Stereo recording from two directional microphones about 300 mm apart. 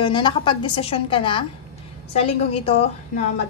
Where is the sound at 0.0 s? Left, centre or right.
Centre.